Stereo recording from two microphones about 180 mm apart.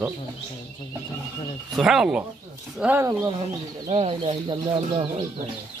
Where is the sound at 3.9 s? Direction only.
30° right (ahead or behind).